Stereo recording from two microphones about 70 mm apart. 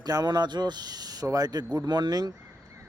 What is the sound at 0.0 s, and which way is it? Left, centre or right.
Speech, right.